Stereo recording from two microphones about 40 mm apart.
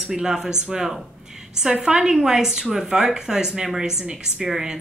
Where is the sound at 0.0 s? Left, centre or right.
Centre.